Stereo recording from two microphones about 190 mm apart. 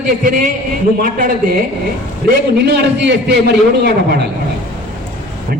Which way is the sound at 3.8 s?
60° right (ahead or behind).